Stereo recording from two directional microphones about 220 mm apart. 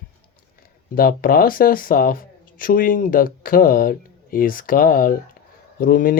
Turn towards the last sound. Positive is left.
turn(degrees=40)  # may be behind; listen again after turning